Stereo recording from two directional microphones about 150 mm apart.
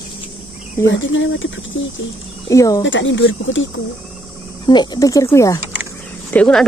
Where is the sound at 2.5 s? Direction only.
20° left (ahead or behind).